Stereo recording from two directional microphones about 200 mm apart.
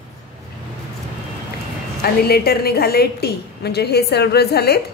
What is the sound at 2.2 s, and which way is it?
A woman's voice, 50° left (ahead or behind).